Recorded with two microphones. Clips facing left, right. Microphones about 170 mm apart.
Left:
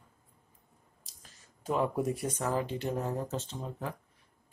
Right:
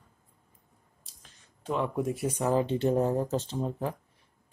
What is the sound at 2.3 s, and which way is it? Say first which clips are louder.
Speech: right 6 dB; 20° right (ahead or behind).